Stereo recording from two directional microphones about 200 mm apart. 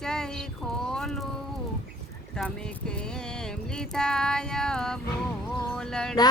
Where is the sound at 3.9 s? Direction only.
5° left (ahead or behind).